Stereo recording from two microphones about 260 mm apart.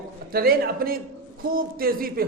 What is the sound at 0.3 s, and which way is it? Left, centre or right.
A man's voice, right.